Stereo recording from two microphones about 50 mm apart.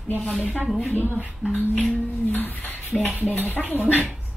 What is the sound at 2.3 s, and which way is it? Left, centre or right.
Female singing, left.